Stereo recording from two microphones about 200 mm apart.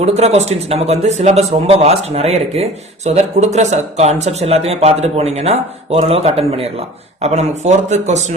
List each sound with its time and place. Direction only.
0.0 s a man's voice: 30° right (ahead or behind)